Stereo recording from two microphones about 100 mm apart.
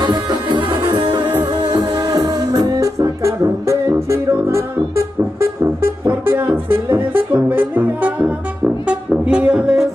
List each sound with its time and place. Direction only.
0.0 s music: 45° right (ahead or behind); by 9.8 s 5° right (ahead or behind)